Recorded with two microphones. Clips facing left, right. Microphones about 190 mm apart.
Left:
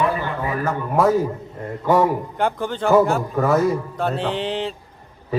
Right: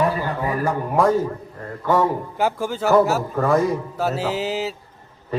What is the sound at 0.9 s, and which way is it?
Speech, 5° left (ahead or behind).